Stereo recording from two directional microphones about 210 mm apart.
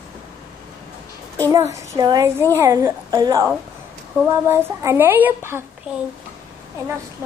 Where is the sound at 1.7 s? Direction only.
20° right (ahead or behind).